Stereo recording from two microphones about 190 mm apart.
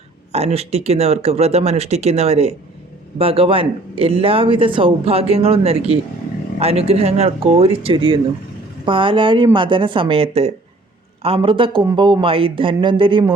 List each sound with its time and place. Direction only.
0.3 s speech: 35° right (ahead or behind)